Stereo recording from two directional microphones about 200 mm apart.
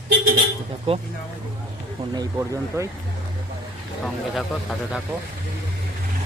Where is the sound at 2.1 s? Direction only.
20° right (ahead or behind).